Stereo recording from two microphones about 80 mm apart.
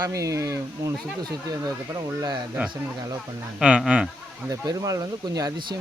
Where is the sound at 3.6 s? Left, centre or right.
Centre.